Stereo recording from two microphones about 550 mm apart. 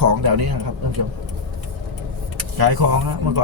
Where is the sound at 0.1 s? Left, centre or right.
Right.